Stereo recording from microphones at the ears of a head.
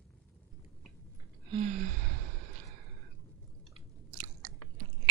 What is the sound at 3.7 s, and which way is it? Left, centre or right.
Chewing, right.